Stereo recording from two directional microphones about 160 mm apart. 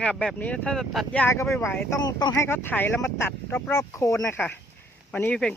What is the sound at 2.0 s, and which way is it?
Speech, 25° left (ahead or behind).